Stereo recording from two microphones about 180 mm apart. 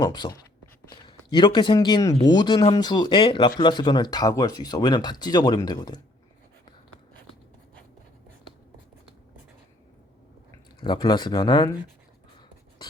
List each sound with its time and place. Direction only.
0.0 s a man's voice: 25° left (ahead or behind)
10.8 s speech: 25° left (ahead or behind)